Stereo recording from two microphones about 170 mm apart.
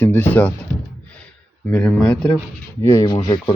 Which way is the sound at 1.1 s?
5° left (ahead or behind).